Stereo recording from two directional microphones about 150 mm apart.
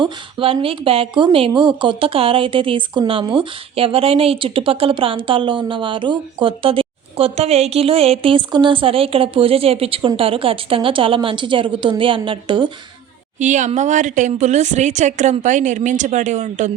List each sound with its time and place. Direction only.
0.0 s a woman's voice: 35° right (ahead or behind)
13.4 s speech: 55° right (ahead or behind)